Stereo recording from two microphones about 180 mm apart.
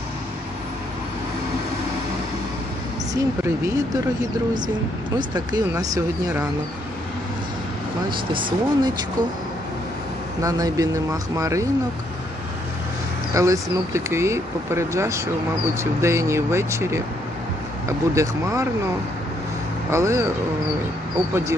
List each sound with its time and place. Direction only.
3.4 s speech: 20° right (ahead or behind)
5.3 s speech: 20° right (ahead or behind)
8.3 s speech: 25° right (ahead or behind)
10.4 s speech: 20° right (ahead or behind)
13.3 s speech: 15° right (ahead or behind)
19.9 s speech: 15° right (ahead or behind)